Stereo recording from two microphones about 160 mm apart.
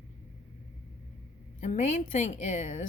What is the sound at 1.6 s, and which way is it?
A woman's voice, 50° left (ahead or behind).